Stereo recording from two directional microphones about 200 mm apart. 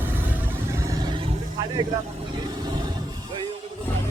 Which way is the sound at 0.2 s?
10° right (ahead or behind).